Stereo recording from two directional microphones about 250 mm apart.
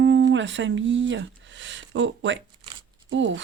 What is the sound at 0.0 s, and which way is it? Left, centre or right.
Speech, right.